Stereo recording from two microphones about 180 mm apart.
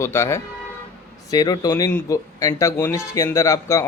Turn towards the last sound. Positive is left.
turn(degrees=15)  # may be behind; listen again after turning